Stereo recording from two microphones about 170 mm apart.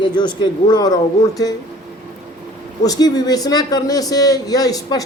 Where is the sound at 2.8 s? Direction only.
25° left (ahead or behind).